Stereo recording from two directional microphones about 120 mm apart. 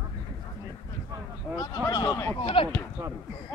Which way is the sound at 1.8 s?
30° left (ahead or behind).